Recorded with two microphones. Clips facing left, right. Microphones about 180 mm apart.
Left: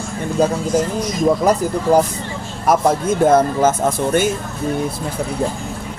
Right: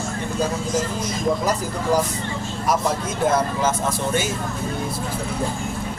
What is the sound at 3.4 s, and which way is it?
Music, 55° left (ahead or behind).